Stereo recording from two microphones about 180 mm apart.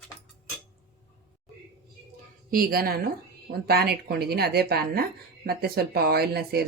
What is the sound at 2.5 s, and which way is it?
Speech, 55° right (ahead or behind).